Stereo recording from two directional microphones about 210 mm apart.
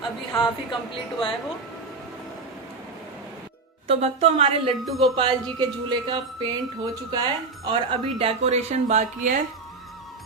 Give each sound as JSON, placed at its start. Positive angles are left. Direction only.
{"t": 0.3, "sound": "a woman's voice", "side_deg": 20}
{"t": 3.8, "sound": "speech", "side_deg": -30}
{"t": 4.8, "sound": "speech", "side_deg": 0}
{"t": 5.9, "sound": "speech", "side_deg": -20}